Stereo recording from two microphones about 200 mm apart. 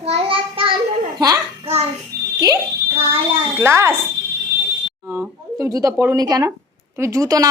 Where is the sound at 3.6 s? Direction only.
15° right (ahead or behind).